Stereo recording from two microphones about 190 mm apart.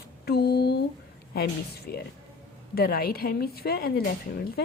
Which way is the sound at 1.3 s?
55° left (ahead or behind).